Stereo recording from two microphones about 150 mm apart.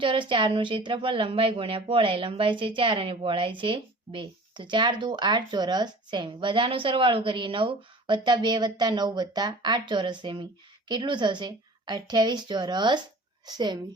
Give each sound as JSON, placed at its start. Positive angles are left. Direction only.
{"t": 0.0, "sound": "a woman's voice", "side_deg": -35}